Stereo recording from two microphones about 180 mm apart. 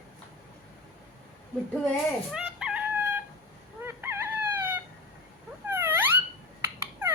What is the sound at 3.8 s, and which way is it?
Chicken, 15° right (ahead or behind).